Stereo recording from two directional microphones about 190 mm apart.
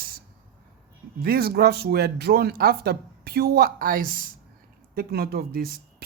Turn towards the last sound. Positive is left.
turn(degrees=-50)  # may be behind; listen again after turning